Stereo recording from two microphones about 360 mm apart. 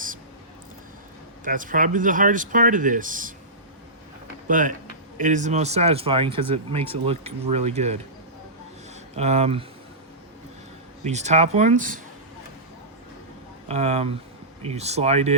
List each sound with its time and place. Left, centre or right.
1.5 s speech: right
4.4 s speech: right
9.1 s speech: centre
11.0 s speech: centre
13.7 s speech: centre